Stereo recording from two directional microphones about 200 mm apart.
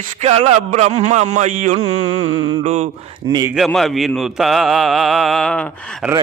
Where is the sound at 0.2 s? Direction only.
30° right (ahead or behind).